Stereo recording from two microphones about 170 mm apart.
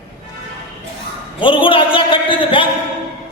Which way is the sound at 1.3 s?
30° left (ahead or behind).